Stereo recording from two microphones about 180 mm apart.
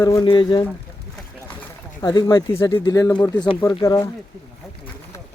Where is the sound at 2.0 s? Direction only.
20° left (ahead or behind).